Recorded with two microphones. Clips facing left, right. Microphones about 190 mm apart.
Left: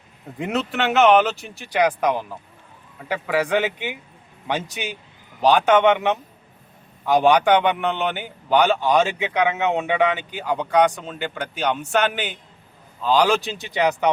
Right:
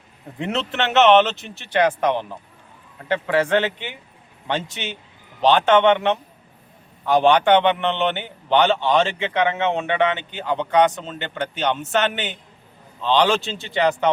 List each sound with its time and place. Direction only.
0.3 s a man's voice: 10° left (ahead or behind)
7.3 s a man's voice: 10° left (ahead or behind)